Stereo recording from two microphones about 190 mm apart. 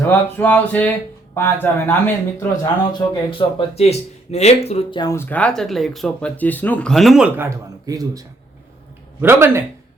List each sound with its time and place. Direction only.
0.0 s speech: 10° left (ahead or behind); by 7.4 s 5° right (ahead or behind)
7.9 s speech: 20° right (ahead or behind)
9.2 s speech: 15° right (ahead or behind)